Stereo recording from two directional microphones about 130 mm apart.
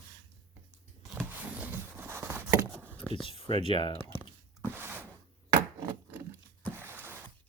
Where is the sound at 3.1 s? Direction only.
40° left (ahead or behind).